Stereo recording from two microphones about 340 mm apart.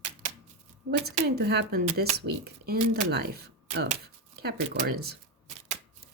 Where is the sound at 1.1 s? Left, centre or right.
Right.